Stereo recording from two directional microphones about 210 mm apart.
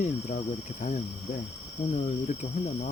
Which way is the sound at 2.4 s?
25° left (ahead or behind).